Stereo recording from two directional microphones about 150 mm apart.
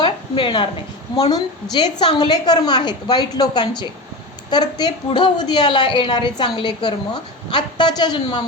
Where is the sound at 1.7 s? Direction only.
30° left (ahead or behind).